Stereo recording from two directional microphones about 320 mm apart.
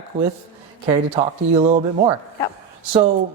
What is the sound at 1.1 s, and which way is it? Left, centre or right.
Speech, right.